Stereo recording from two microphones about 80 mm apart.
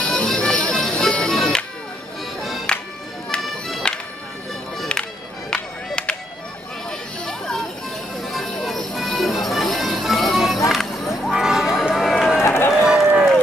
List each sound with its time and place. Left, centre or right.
0.0 s music: centre
2.7 s music: centre
10.7 s run: centre
12.4 s run: left
12.7 s run: centre